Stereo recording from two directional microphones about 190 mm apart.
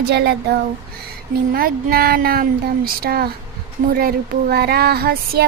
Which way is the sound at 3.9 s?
50° right (ahead or behind).